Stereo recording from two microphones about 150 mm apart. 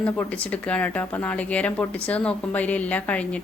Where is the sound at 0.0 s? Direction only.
10° left (ahead or behind).